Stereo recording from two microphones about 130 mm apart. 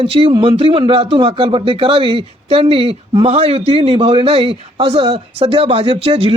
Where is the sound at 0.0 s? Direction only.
45° right (ahead or behind).